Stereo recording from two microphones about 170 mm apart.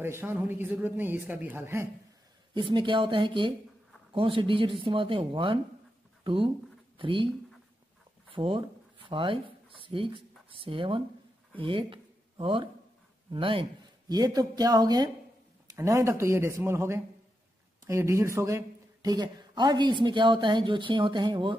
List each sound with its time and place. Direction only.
0.0 s speech: 15° right (ahead or behind)
2.5 s a woman's voice: 30° right (ahead or behind)
8.4 s a woman's voice: 30° right (ahead or behind)